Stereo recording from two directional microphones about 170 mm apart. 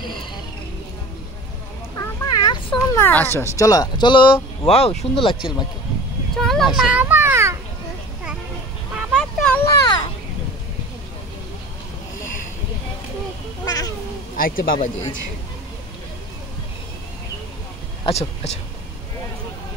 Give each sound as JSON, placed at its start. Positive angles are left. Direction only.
{"t": 2.0, "sound": "cat", "side_deg": 25}
{"t": 3.0, "sound": "speech", "side_deg": 10}
{"t": 6.3, "sound": "a sound", "side_deg": 0}
{"t": 6.8, "sound": "a child's voice", "side_deg": -10}
{"t": 8.9, "sound": "a sound", "side_deg": 0}
{"t": 9.8, "sound": "a sound", "side_deg": 25}
{"t": 13.7, "sound": "speech", "side_deg": 20}
{"t": 14.3, "sound": "speech", "side_deg": 55}
{"t": 18.0, "sound": "speech", "side_deg": 35}